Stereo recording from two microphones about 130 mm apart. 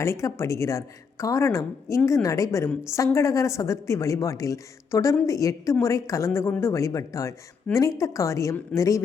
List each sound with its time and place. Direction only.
0.0 s a woman's voice: 20° left (ahead or behind)